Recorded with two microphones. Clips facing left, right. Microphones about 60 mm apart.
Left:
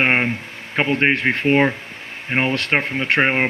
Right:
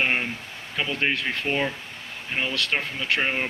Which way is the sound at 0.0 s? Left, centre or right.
Left.